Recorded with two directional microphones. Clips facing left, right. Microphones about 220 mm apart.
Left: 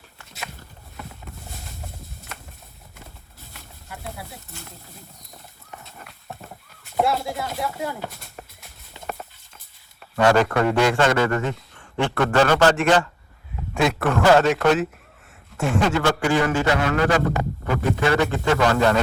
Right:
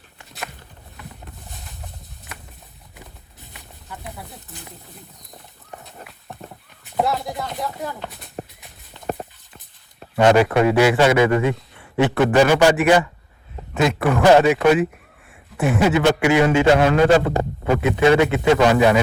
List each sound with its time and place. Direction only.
2.3 s a sound: centre (ahead or behind)
4.4 s speech: centre (ahead or behind)
6.9 s speech: centre (ahead or behind)
10.0 s a sound: 20° right (ahead or behind)
10.7 s a man's voice: 5° right (ahead or behind)
16.4 s a man's voice: 25° right (ahead or behind)